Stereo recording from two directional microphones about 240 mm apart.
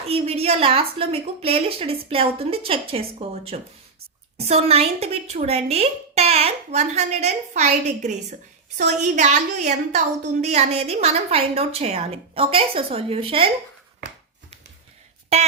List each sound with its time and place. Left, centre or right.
0.0 s a woman's voice: right